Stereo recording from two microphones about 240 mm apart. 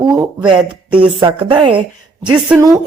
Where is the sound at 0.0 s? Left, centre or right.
Centre.